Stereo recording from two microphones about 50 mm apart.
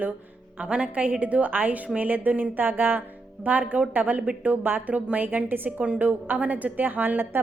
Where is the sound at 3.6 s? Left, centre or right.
Right.